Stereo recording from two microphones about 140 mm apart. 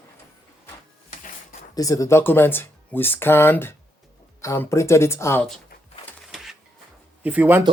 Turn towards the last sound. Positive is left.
turn(degrees=-15)  # may be behind; listen again after turning